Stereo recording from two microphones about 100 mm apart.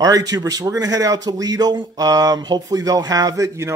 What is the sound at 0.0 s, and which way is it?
Speech, 40° right (ahead or behind).